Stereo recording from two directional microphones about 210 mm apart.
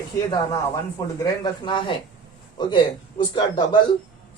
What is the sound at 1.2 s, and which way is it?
A man's voice, 20° left (ahead or behind).